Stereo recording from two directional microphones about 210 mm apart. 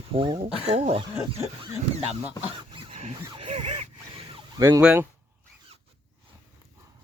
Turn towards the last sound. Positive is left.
turn(degrees=-10)  # may be behind; listen again after turning